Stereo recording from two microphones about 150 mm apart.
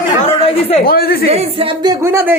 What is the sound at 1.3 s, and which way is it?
Speech, 40° right (ahead or behind).